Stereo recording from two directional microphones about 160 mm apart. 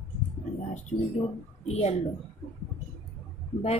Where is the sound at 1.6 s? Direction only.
40° left (ahead or behind).